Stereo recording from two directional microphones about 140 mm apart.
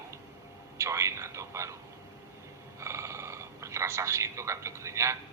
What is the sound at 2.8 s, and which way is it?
Speech, 20° right (ahead or behind).